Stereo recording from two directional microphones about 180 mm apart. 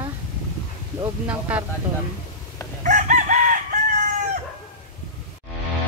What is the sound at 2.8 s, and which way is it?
Chicken, 45° right (ahead or behind).